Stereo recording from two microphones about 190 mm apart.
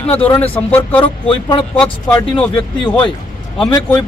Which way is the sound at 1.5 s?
20° left (ahead or behind).